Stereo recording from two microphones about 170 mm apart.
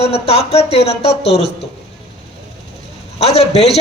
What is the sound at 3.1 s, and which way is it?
Speech, 40° left (ahead or behind).